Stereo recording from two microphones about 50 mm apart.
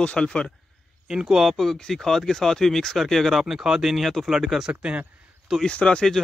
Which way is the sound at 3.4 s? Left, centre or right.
Centre.